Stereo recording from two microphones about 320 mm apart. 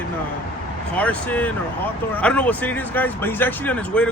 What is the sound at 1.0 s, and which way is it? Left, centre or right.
Speech, centre.